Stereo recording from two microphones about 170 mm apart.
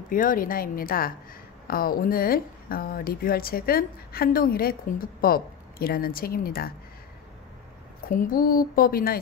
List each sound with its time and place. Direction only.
0.1 s speech: 55° left (ahead or behind)
8.1 s speech: 55° left (ahead or behind)